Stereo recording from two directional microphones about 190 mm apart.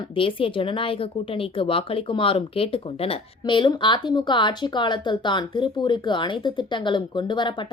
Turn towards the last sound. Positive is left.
turn(degrees=25)  # may be behind; listen again after turning